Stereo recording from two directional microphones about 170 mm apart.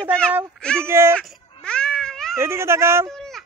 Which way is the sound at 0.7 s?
15° right (ahead or behind).